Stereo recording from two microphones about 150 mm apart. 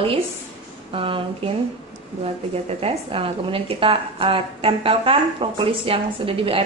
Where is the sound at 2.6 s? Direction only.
40° right (ahead or behind).